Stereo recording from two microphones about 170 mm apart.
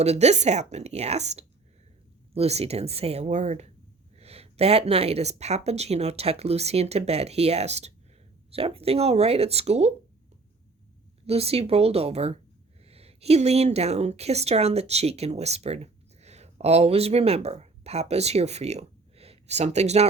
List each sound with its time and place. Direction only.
0.0 s speech: 40° right (ahead or behind)
11.3 s speech: 35° right (ahead or behind)